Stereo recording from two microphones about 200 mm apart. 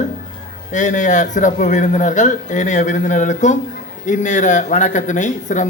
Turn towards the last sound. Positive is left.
turn(degrees=40)  # may be behind; listen again after turning